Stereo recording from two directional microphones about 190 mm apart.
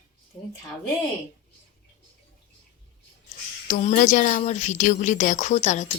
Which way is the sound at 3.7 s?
45° left (ahead or behind).